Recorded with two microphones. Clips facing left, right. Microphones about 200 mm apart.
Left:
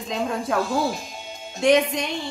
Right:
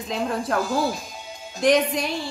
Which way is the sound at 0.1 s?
Centre (ahead or behind).